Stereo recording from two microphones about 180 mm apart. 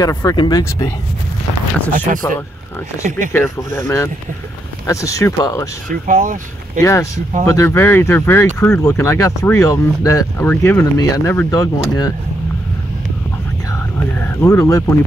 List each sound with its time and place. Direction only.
0.0 s speech: 20° left (ahead or behind)
2.1 s speech: 45° right (ahead or behind)
3.3 s speech: 15° left (ahead or behind)
5.9 s speech: 45° right (ahead or behind)
6.8 s speech: 15° left (ahead or behind)
14.1 s speech: 10° left (ahead or behind)